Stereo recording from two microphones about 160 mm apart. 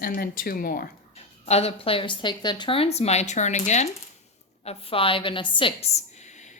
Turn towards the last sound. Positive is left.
turn(degrees=30)  # may be behind; listen again after turning